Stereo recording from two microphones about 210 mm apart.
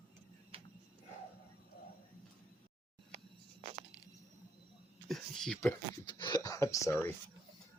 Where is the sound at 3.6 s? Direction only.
30° right (ahead or behind).